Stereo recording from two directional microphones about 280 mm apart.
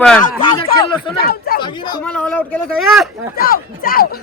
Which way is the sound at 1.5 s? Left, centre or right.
Left.